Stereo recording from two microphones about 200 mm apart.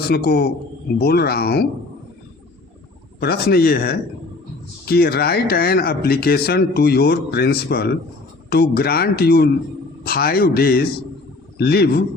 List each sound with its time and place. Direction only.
0.1 s speech: 50° left (ahead or behind)
3.2 s speech: 55° left (ahead or behind)